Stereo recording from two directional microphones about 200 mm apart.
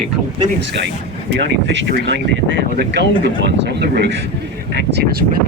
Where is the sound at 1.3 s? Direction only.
60° right (ahead or behind).